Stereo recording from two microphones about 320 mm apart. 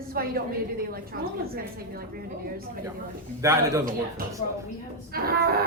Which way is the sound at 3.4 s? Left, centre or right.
Centre.